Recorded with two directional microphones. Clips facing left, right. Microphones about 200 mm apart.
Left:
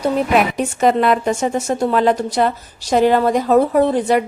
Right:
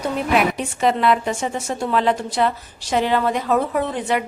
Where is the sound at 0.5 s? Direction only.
45° left (ahead or behind).